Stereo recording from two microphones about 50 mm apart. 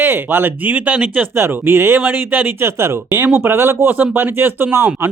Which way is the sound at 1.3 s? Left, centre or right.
Right.